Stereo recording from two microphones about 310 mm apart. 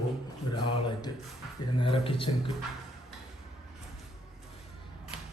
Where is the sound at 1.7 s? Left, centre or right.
Centre.